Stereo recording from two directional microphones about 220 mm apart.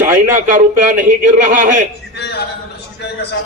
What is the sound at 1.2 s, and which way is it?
Speech, 35° right (ahead or behind).